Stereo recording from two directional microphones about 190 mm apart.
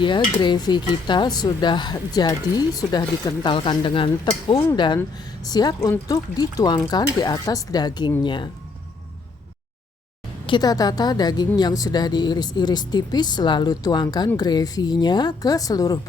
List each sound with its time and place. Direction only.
0.0 s a woman's voice: 25° left (ahead or behind)
10.4 s a woman's voice: 25° left (ahead or behind)